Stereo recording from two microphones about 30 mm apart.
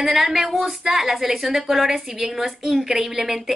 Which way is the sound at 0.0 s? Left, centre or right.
Centre.